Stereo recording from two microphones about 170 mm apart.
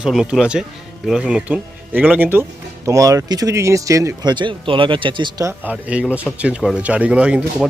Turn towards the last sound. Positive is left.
turn(degrees=-5)  # may be behind; listen again after turning